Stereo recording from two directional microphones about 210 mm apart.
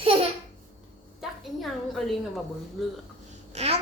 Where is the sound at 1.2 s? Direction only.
Centre (ahead or behind).